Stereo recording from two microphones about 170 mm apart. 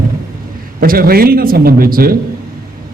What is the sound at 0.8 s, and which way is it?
A man's voice, 60° right (ahead or behind).